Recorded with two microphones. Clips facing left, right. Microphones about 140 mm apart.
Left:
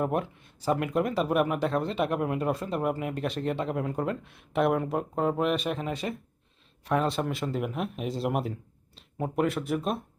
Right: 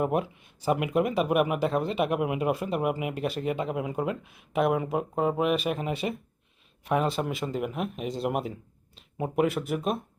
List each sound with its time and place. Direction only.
0.0 s speech: 5° right (ahead or behind)
5.9 s speech: 20° right (ahead or behind)
6.8 s speech: 5° right (ahead or behind)